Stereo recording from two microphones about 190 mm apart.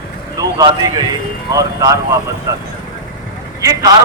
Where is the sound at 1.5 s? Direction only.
20° right (ahead or behind).